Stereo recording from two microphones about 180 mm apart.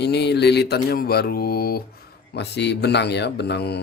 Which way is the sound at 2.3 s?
70° left (ahead or behind).